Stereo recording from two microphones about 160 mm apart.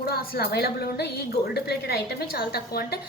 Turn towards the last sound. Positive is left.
turn(degrees=75)  # may be behind; listen again after turning